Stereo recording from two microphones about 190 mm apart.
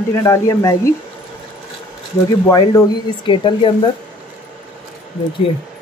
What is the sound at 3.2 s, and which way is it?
Speech, 25° left (ahead or behind).